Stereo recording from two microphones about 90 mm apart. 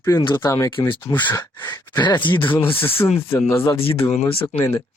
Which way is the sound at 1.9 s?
55° left (ahead or behind).